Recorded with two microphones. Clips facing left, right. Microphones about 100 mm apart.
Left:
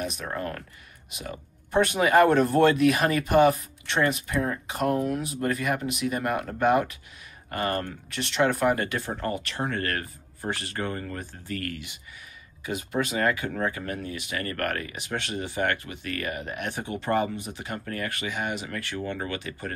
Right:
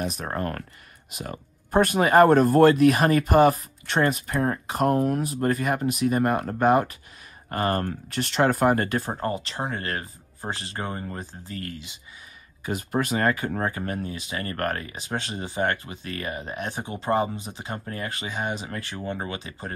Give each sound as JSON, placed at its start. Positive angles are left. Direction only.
{"t": 0.0, "sound": "speech", "side_deg": -40}
{"t": 12.6, "sound": "speech", "side_deg": -45}